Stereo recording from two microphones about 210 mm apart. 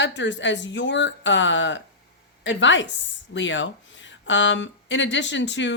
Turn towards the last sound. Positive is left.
turn(degrees=55)  # may be behind; listen again after turning